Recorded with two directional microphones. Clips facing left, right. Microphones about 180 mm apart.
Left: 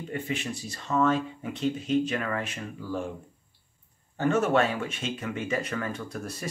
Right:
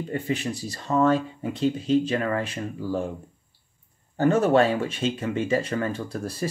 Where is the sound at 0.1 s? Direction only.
35° right (ahead or behind).